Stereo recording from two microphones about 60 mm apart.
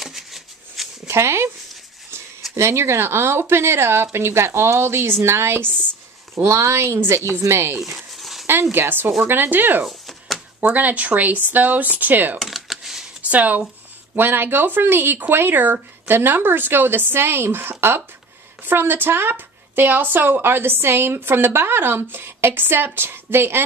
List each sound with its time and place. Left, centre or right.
0.0 s shuffling cards: centre
1.0 s speech: right
2.5 s speech: right
8.2 s dog: centre
8.7 s speech: right
9.8 s a sound: centre
10.6 s speech: right
12.4 s computer keyboard: centre
13.3 s speech: right